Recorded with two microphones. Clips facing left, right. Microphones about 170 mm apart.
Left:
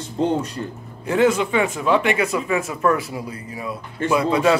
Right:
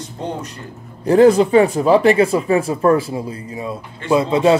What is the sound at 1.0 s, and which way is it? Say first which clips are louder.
Speech: right 7 dB; 35° right (ahead or behind).